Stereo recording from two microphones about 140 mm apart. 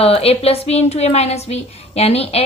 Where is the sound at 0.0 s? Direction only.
45° left (ahead or behind).